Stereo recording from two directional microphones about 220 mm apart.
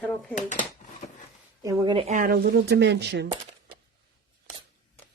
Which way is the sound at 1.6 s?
20° right (ahead or behind).